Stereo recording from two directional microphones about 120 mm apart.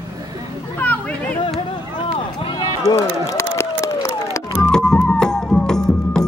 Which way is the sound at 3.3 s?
25° left (ahead or behind).